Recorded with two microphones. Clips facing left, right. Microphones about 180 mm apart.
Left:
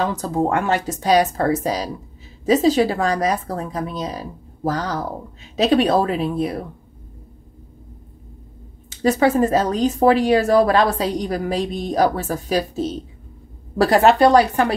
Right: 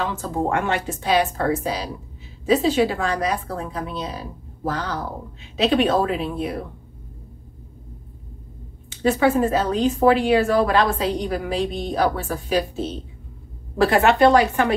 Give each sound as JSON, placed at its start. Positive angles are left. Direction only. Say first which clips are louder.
{"t": 0.0, "sound": "speech", "louder": "left 4 dB", "side_deg": 40}
{"t": 8.9, "sound": "speech", "louder": "left 2 dB", "side_deg": 40}